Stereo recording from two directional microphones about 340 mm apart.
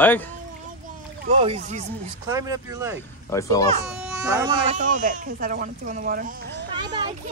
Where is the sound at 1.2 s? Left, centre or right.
Centre.